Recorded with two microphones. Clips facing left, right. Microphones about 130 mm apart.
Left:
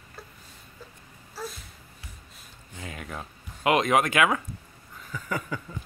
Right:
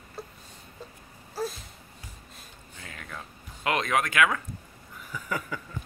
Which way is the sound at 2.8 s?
20° left (ahead or behind).